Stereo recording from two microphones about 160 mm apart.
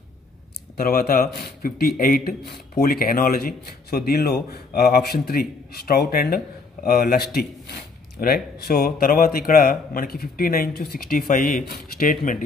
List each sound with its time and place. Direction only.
0.7 s speech: 70° left (ahead or behind)